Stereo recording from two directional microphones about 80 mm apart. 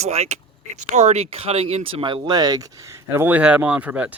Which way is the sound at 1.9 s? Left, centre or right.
Right.